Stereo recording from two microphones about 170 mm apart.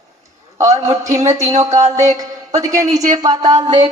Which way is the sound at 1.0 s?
20° right (ahead or behind).